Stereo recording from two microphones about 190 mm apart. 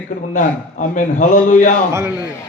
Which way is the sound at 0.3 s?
40° left (ahead or behind).